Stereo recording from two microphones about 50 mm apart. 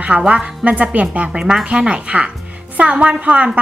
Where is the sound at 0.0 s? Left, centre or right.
Right.